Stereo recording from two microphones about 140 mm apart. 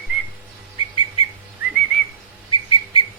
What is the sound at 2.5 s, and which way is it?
Whistle, 35° left (ahead or behind).